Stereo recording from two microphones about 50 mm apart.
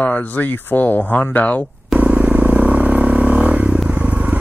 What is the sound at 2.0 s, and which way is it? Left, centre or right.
Vehicle, right.